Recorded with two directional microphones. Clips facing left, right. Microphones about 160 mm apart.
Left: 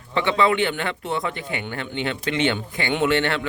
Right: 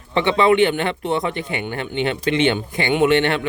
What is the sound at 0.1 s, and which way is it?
A man's voice, 20° right (ahead or behind).